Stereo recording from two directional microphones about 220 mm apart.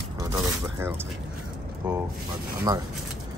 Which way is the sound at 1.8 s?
20° right (ahead or behind).